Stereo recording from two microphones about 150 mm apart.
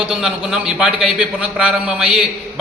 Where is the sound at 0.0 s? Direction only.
5° right (ahead or behind).